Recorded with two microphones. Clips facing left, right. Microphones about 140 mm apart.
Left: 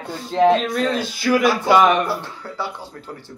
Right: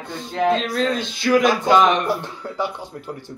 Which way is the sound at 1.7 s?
10° left (ahead or behind).